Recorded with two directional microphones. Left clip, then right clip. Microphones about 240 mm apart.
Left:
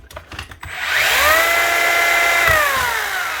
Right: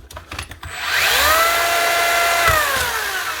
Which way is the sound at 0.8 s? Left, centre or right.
Centre.